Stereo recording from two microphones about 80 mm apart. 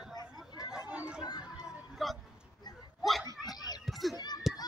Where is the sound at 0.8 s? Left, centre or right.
Centre.